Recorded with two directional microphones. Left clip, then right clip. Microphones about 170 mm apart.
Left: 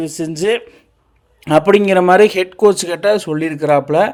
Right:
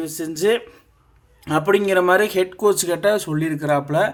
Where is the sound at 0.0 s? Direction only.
30° left (ahead or behind).